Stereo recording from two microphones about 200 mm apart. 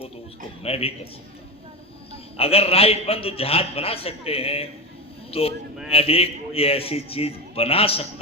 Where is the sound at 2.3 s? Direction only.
30° left (ahead or behind).